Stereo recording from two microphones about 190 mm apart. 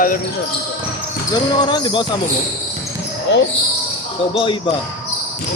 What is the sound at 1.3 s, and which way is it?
Speech, 25° left (ahead or behind).